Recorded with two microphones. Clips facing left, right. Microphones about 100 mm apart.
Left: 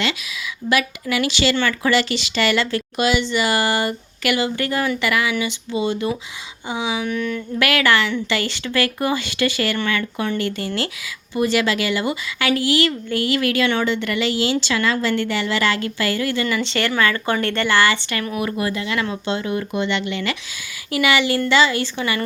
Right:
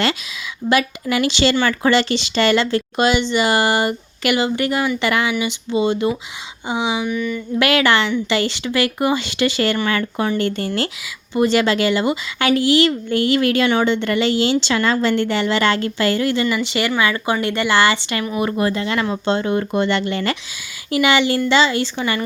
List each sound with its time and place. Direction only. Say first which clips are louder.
1.1 s speech: right 3 dB; 25° right (ahead or behind)
7.0 s a sound: right 1 dB; 5° right (ahead or behind)
7.6 s speech: right 2 dB; 25° right (ahead or behind); by 20.3 s 40° right (ahead or behind)
20.9 s speech: right 2 dB; 25° right (ahead or behind)